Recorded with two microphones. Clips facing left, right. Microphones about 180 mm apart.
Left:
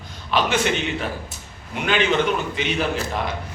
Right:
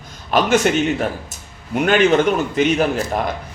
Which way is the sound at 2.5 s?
45° right (ahead or behind).